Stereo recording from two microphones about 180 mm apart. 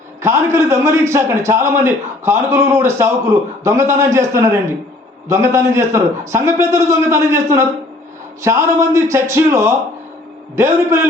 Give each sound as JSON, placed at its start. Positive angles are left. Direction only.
{"t": 0.2, "sound": "a man's voice", "side_deg": -15}